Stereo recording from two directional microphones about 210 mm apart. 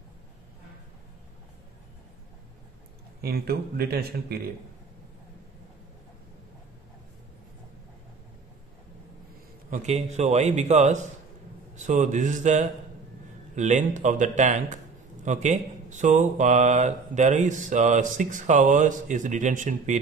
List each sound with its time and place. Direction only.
3.2 s speech: 45° right (ahead or behind)
9.7 s speech: 30° right (ahead or behind)